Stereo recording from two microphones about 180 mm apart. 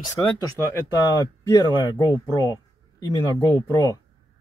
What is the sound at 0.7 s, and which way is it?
Speech, 15° left (ahead or behind).